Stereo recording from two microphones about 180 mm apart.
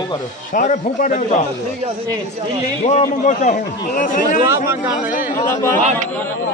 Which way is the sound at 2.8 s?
40° left (ahead or behind).